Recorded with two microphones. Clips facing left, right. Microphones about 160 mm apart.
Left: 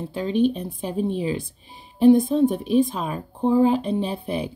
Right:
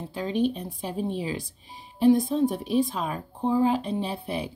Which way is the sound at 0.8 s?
20° left (ahead or behind).